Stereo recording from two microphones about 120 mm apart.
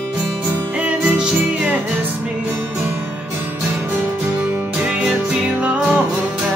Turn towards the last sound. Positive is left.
turn(degrees=-10)  # may be behind; listen again after turning